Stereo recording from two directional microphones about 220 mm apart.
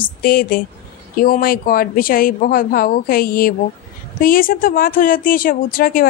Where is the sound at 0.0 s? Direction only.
40° left (ahead or behind).